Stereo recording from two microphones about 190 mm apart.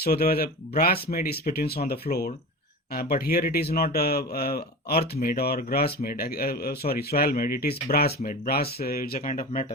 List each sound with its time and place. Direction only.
0.0 s speech: 55° left (ahead or behind)